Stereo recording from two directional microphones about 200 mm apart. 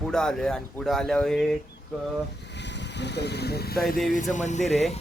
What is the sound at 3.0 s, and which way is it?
Speech, 60° left (ahead or behind).